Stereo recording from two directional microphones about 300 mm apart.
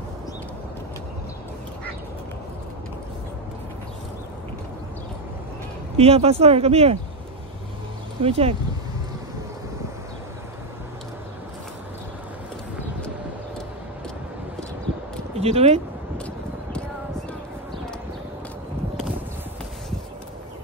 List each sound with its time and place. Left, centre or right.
5.9 s speech: centre
8.2 s speech: centre
15.3 s speech: centre